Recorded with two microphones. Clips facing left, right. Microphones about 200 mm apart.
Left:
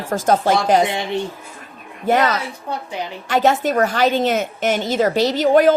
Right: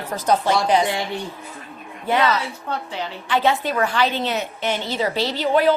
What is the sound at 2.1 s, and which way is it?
Speech, 45° left (ahead or behind).